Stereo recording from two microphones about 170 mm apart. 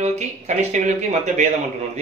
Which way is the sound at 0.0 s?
40° right (ahead or behind).